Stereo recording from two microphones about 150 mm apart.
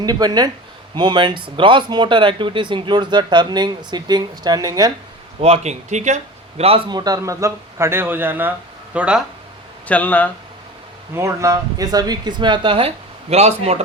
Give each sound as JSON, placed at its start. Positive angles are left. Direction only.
{"t": 0.0, "sound": "speech", "side_deg": -25}
{"t": 5.4, "sound": "speech", "side_deg": -45}
{"t": 6.6, "sound": "a man's voice", "side_deg": -40}
{"t": 9.8, "sound": "speech", "side_deg": 10}
{"t": 11.1, "sound": "speech", "side_deg": -20}